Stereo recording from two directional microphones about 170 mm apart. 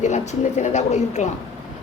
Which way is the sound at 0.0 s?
45° left (ahead or behind).